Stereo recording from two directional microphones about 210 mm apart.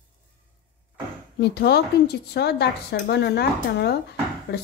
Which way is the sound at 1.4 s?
50° left (ahead or behind).